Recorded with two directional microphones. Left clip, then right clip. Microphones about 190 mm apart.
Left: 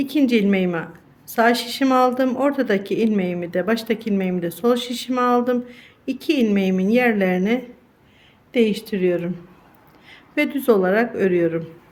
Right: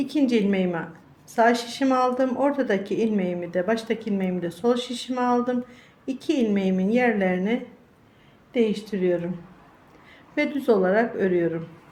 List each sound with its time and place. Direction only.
0.0 s a woman's voice: 30° left (ahead or behind)